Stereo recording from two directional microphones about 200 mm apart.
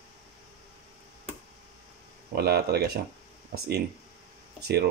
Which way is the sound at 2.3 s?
50° right (ahead or behind).